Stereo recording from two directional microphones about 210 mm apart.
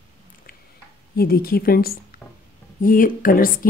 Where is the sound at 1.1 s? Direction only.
45° left (ahead or behind).